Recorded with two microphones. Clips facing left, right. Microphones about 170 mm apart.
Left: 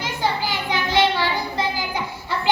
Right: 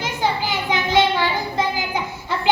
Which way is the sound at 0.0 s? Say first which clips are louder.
Right 1 dB; 20° right (ahead or behind).